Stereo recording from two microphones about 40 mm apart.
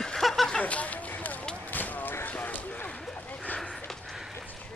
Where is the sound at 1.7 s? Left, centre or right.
Left.